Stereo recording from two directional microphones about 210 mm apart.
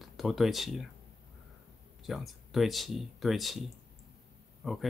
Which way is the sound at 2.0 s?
Centre (ahead or behind).